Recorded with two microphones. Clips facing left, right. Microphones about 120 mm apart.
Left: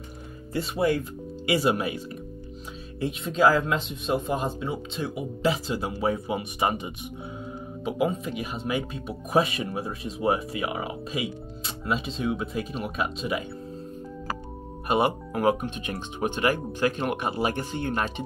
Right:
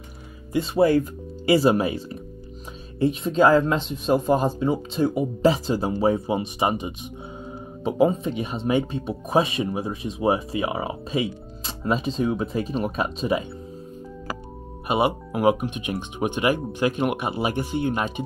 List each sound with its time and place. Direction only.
0.7 s speech: 40° right (ahead or behind); by 6.9 s 20° right (ahead or behind)
7.8 s speech: 30° right (ahead or behind)
14.9 s speech: 10° right (ahead or behind)